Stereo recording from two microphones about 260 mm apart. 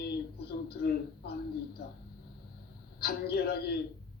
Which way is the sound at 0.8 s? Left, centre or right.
Left.